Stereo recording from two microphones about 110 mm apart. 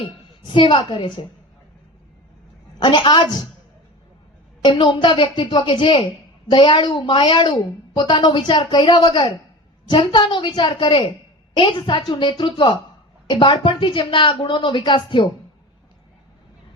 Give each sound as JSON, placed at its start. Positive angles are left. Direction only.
{"t": 0.0, "sound": "a woman's voice", "side_deg": 50}
{"t": 2.7, "sound": "a woman's voice", "side_deg": 45}
{"t": 4.6, "sound": "a woman's voice", "side_deg": 50}